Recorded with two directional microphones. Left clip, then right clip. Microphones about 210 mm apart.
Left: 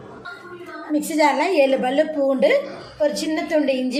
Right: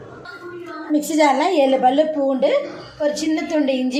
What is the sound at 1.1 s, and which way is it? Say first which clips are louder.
Speech: right 2 dB; 10° right (ahead or behind).